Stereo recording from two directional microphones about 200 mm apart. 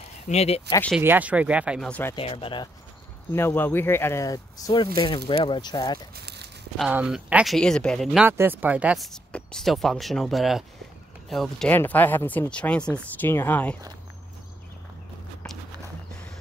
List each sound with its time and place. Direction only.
0.3 s speech: 30° left (ahead or behind)
1.0 s speech: 10° right (ahead or behind)
1.9 s speech: 10° left (ahead or behind)
2.1 s speech: 25° left (ahead or behind)
3.3 s speech: 10° left (ahead or behind)
6.1 s a sound: 55° right (ahead or behind)
6.8 s speech: 5° right (ahead or behind)